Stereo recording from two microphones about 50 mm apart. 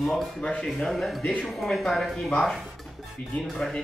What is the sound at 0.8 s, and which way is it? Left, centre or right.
Speech, centre.